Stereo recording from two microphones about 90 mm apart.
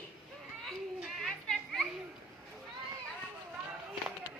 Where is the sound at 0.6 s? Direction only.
Centre (ahead or behind).